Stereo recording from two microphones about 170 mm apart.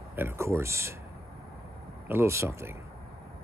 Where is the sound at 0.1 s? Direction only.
15° right (ahead or behind).